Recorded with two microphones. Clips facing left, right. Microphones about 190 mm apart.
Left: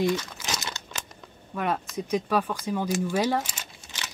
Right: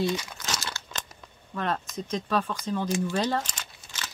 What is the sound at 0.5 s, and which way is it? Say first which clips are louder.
Crumpling: even; 20° left (ahead or behind).